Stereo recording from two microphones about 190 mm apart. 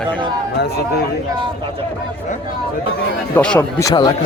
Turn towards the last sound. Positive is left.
turn(degrees=20)  # may be behind; listen again after turning